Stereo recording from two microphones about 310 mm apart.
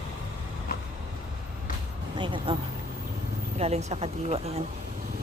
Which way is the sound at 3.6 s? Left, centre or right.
Right.